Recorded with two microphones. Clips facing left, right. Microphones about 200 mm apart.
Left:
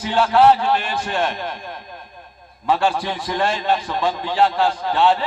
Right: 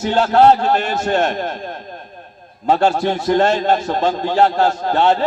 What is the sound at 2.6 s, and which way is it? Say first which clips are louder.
A man's voice: right 4 dB; 45° right (ahead or behind).